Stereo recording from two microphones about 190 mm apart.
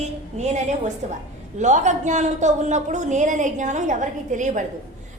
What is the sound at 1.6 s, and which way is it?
A woman's voice, 40° right (ahead or behind).